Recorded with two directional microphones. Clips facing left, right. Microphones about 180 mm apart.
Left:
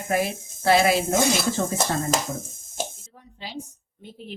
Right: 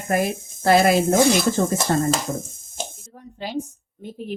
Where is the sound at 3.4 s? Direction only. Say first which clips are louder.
Right 8 dB; 50° right (ahead or behind).